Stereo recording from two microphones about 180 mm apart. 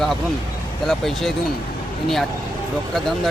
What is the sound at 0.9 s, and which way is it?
Speech, centre (ahead or behind).